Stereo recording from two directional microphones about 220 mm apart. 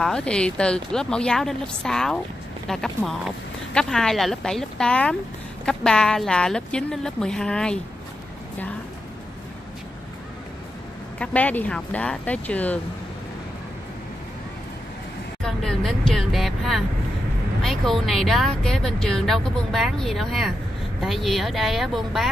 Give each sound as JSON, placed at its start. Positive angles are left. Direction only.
{"t": 0.0, "sound": "a woman's voice", "side_deg": 5}
{"t": 11.1, "sound": "speech", "side_deg": 5}
{"t": 15.4, "sound": "vehicle", "side_deg": 0}
{"t": 17.6, "sound": "a woman's voice", "side_deg": 0}